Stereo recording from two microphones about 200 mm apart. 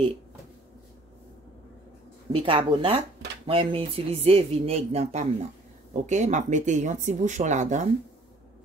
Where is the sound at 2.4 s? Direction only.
25° right (ahead or behind).